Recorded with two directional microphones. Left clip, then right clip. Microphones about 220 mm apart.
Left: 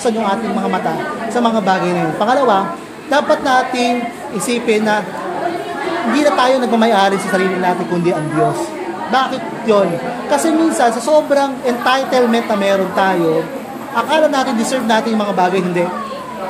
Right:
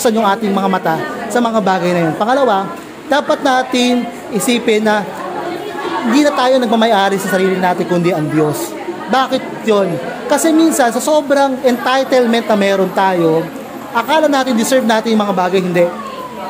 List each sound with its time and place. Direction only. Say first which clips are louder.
0.0 s a woman's voice: right 3 dB; 50° right (ahead or behind)
6.1 s a woman's voice: right 1 dB; 45° right (ahead or behind)